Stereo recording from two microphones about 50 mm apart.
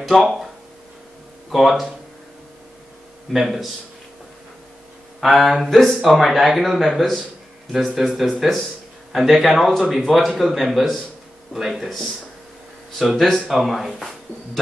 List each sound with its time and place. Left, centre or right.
0.1 s speech: centre
1.5 s speech: centre
3.3 s speech: centre
5.2 s speech: centre
13.0 s speech: centre